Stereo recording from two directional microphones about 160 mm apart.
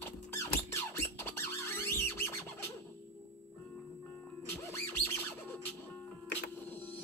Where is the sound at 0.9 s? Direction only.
15° left (ahead or behind).